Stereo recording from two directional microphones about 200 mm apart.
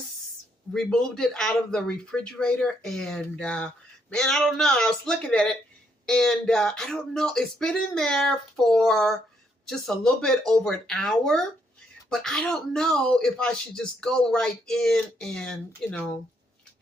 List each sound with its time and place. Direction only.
0.7 s speech: 5° left (ahead or behind)